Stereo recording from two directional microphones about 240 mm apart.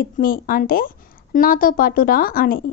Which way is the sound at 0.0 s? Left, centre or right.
Left.